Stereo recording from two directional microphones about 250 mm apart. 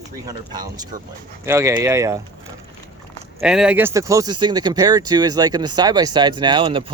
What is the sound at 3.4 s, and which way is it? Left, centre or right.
Speech, centre.